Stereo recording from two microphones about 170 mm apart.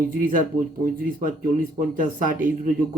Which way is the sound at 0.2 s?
55° right (ahead or behind).